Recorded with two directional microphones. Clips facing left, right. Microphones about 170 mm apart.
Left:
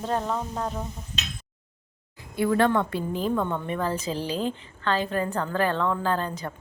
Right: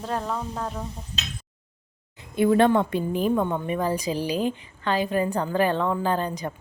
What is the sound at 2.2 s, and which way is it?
A woman's voice, 20° right (ahead or behind).